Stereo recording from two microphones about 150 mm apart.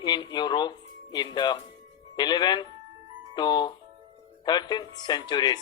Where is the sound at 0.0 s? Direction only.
30° left (ahead or behind).